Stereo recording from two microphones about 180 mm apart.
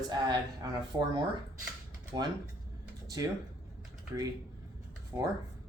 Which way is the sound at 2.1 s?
20° right (ahead or behind).